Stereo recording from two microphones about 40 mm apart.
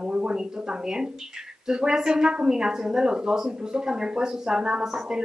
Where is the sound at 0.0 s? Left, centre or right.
Right.